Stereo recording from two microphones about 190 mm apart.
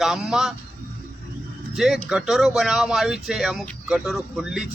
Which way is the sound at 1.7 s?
Centre (ahead or behind).